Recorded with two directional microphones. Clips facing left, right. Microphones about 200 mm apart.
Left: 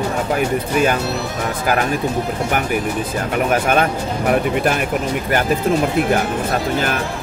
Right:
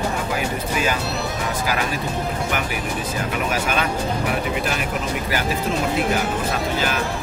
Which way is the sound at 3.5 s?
55° left (ahead or behind).